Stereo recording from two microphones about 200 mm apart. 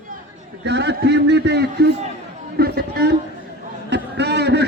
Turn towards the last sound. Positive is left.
turn(degrees=-55)  # may be behind; listen again after turning